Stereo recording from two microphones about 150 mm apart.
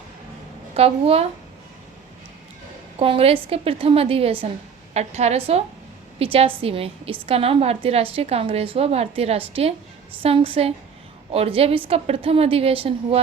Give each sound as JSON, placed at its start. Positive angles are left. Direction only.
{"t": 0.7, "sound": "a woman's voice", "side_deg": -40}
{"t": 3.0, "sound": "a woman's voice", "side_deg": -40}